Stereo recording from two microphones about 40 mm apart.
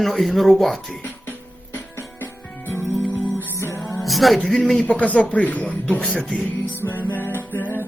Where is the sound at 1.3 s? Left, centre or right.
Left.